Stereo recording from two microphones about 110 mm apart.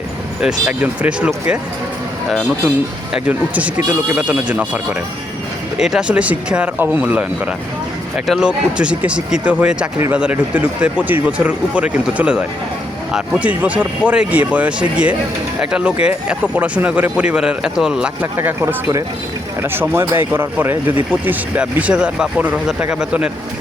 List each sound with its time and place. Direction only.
0.4 s speech: 10° right (ahead or behind)
3.2 s speech: 15° right (ahead or behind)
8.3 s speech: 10° right (ahead or behind)
18.3 s speech: 20° right (ahead or behind)